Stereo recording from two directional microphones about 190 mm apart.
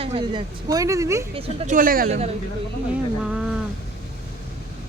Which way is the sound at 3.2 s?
5° right (ahead or behind).